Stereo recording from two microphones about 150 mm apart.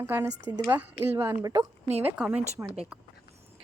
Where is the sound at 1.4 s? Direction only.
25° right (ahead or behind).